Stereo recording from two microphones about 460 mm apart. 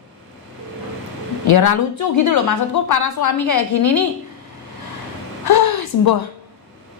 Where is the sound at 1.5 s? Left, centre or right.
Left.